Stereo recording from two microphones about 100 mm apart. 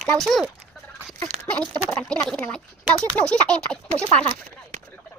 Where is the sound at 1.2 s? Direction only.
15° left (ahead or behind).